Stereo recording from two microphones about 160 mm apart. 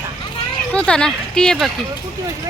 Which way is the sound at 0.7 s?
5° left (ahead or behind).